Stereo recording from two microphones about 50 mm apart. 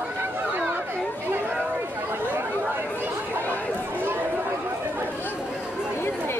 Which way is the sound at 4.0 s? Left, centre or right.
Right.